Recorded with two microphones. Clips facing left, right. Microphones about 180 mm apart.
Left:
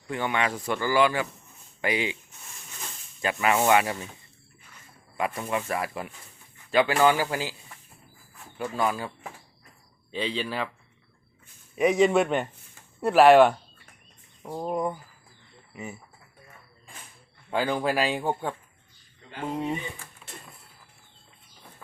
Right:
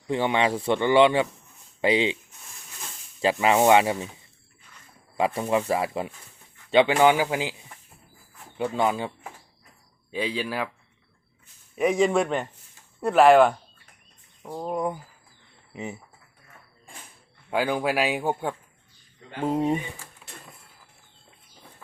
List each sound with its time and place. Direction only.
0.1 s speech: 25° right (ahead or behind)
3.2 s speech: 25° right (ahead or behind)
5.1 s speech: 30° right (ahead or behind)
8.5 s speech: 20° right (ahead or behind)
10.1 s speech: 10° right (ahead or behind)
11.8 s speech: centre (ahead or behind)
15.7 s speech: 20° right (ahead or behind)
17.5 s speech: 10° right (ahead or behind)
19.4 s speech: 40° right (ahead or behind)